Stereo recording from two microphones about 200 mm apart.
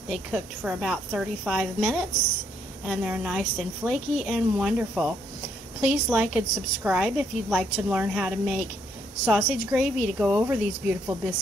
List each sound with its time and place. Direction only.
0.1 s a woman's voice: centre (ahead or behind)